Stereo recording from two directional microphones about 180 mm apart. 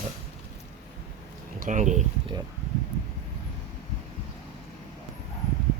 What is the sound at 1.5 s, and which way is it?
Speech, 45° right (ahead or behind).